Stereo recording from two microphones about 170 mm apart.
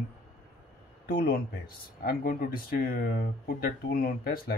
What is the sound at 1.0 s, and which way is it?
Speech, 60° left (ahead or behind).